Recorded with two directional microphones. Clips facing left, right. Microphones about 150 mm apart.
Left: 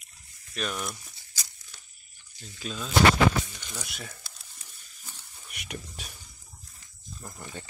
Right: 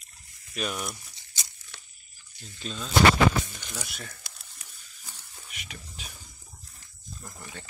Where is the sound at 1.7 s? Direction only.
70° right (ahead or behind).